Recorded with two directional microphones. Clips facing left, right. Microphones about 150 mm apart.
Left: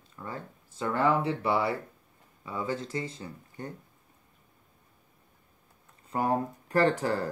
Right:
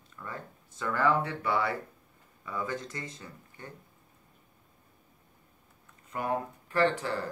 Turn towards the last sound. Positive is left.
turn(degrees=40)  # may be behind; listen again after turning